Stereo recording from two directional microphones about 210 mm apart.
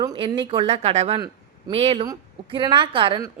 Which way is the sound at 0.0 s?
20° right (ahead or behind).